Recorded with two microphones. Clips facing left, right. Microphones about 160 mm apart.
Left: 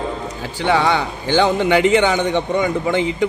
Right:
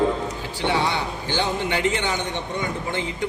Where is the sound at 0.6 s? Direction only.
85° left.